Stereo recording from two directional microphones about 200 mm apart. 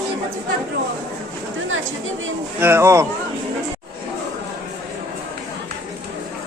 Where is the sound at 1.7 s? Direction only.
75° right (ahead or behind).